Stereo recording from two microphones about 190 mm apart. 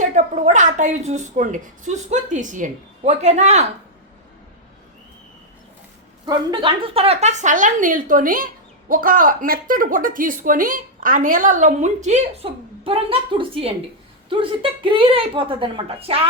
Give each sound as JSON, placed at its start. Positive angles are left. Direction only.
{"t": 0.0, "sound": "a woman's voice", "side_deg": -40}
{"t": 6.2, "sound": "a woman's voice", "side_deg": -25}